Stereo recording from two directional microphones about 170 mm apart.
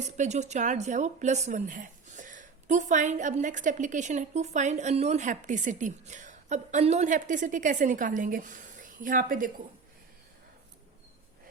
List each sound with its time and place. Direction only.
0.2 s speech: 40° right (ahead or behind)